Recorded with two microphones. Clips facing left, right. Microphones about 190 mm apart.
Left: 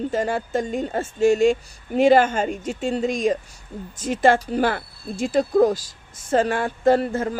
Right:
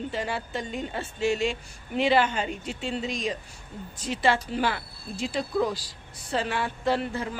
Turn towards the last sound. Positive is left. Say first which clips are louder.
# left 8 dB
turn(degrees=45)  # may be behind; listen again after turning